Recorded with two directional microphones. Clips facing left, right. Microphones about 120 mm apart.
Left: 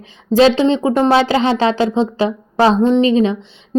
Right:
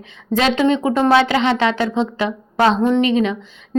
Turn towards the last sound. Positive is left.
turn(degrees=30)  # may be behind; listen again after turning